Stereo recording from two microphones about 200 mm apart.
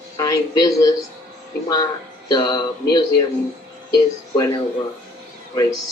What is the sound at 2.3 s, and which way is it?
Speech, 20° left (ahead or behind).